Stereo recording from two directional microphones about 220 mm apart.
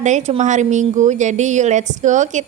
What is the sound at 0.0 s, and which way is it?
A woman's voice, 35° right (ahead or behind).